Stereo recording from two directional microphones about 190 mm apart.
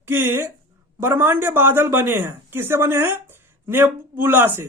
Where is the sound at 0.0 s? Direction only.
10° right (ahead or behind).